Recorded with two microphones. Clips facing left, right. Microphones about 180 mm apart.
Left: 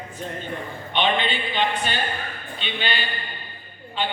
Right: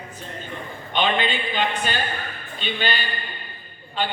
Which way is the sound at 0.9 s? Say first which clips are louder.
Even; 45° right (ahead or behind).